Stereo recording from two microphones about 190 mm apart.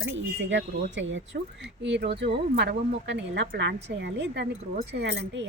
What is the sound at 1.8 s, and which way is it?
Speech, 65° right (ahead or behind).